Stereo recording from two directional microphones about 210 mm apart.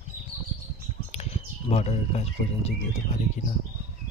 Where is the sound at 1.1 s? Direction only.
30° left (ahead or behind).